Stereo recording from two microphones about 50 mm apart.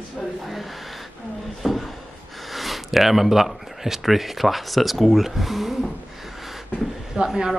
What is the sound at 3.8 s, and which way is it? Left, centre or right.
Speech, centre.